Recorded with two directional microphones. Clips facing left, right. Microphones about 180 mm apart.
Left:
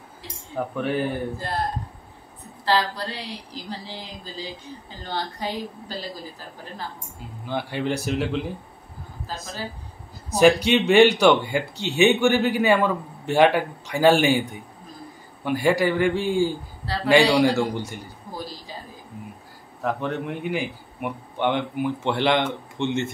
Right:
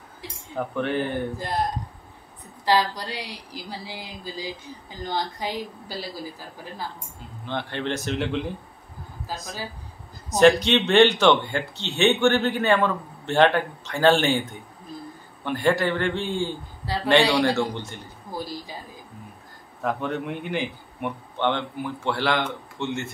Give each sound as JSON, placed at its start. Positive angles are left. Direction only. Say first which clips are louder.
{"t": 0.6, "sound": "speech", "louder": "left 1 dB", "side_deg": 5}
{"t": 1.3, "sound": "speech", "louder": "right 1 dB", "side_deg": -15}
{"t": 7.4, "sound": "a man's voice", "louder": "left 2 dB", "side_deg": 10}
{"t": 9.3, "sound": "speech", "louder": "even", "side_deg": -15}
{"t": 10.3, "sound": "a man's voice", "louder": "even", "side_deg": 10}
{"t": 16.8, "sound": "speech", "louder": "even", "side_deg": -15}
{"t": 17.1, "sound": "a man's voice", "louder": "left 2 dB", "side_deg": 10}
{"t": 19.8, "sound": "a man's voice", "louder": "left 1 dB", "side_deg": 0}